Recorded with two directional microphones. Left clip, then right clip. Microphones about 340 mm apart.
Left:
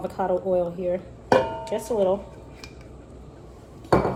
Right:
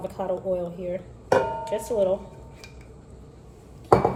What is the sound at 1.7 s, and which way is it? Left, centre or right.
Speech, centre.